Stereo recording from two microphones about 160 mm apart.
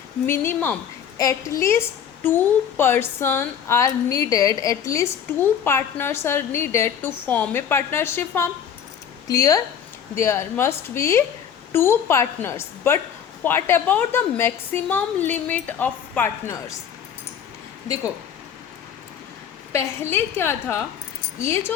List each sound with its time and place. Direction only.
0.3 s speech: 10° left (ahead or behind)
19.7 s speech: 15° left (ahead or behind)